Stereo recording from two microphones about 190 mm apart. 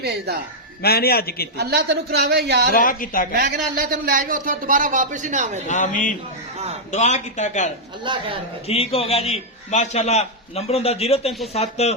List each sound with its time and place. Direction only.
0.0 s a woman's voice: 55° right (ahead or behind)
0.8 s a man's voice: 55° left (ahead or behind)
1.5 s a woman's voice: 60° right (ahead or behind)
2.7 s a man's voice: 45° left (ahead or behind)
3.3 s speech: 50° right (ahead or behind)
5.6 s a man's voice: 40° left (ahead or behind)
8.0 s a woman's voice: 25° right (ahead or behind)
8.6 s a man's voice: 30° left (ahead or behind)